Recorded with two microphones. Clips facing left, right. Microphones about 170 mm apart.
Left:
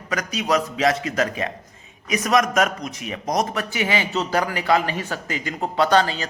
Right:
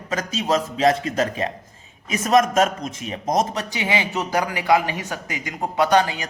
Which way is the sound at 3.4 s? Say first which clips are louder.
Even; 20° right (ahead or behind).